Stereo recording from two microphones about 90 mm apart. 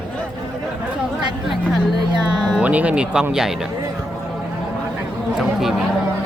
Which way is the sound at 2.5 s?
15° right (ahead or behind).